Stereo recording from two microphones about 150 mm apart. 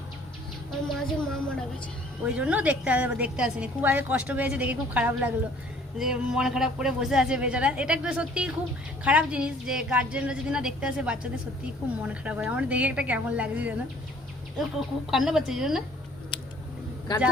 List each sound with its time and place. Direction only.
0.9 s a sound: 5° left (ahead or behind)
2.2 s a woman's voice: 10° right (ahead or behind)
15.1 s a man's voice: 5° right (ahead or behind)
17.1 s speech: 30° left (ahead or behind)